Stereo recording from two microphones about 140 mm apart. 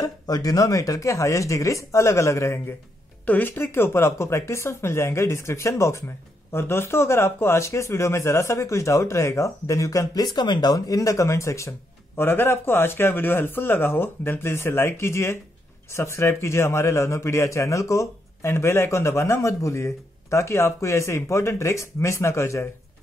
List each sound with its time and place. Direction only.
0.0 s speech: 25° left (ahead or behind)